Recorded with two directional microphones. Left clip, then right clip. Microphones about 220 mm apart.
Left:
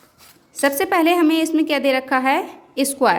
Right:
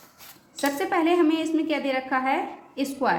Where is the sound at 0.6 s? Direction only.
50° left (ahead or behind).